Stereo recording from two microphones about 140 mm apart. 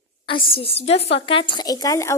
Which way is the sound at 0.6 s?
45° left (ahead or behind).